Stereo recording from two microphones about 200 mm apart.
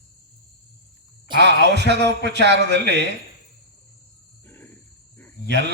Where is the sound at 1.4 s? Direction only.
60° right (ahead or behind).